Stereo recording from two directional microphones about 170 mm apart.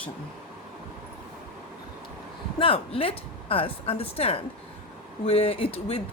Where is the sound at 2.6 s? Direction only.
30° left (ahead or behind).